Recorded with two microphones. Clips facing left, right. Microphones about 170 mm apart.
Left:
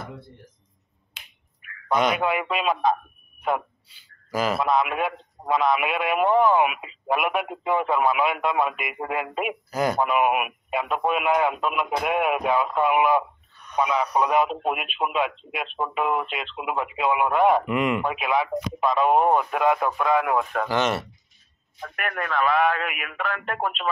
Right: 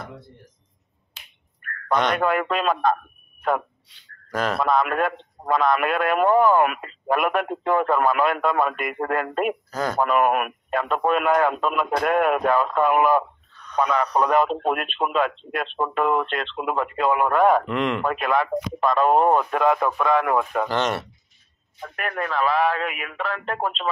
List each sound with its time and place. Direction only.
1.6 s speech: 5° left (ahead or behind)
22.4 s speech: 30° right (ahead or behind)